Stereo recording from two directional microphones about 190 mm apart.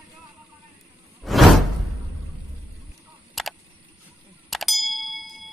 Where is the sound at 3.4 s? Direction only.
Centre (ahead or behind).